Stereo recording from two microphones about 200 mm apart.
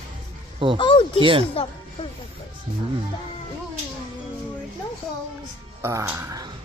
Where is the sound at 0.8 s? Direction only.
25° left (ahead or behind).